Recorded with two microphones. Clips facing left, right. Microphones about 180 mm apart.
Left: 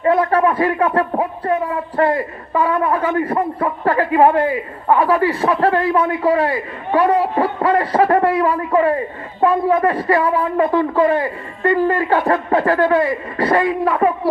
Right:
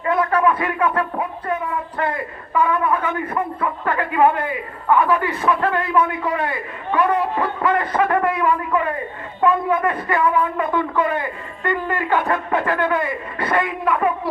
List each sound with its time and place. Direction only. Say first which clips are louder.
0.0 s a man's voice: left 4 dB; 30° left (ahead or behind)